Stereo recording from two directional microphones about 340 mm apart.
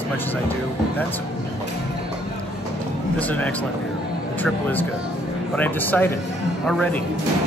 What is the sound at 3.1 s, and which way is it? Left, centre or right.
Speech, centre.